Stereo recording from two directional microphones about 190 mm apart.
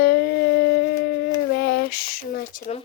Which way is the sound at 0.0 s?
55° left (ahead or behind).